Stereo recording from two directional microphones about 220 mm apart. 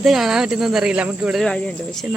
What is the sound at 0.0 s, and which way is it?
Speech, centre (ahead or behind).